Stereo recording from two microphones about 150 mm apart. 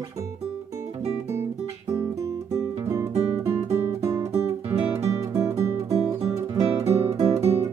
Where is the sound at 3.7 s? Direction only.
45° right (ahead or behind).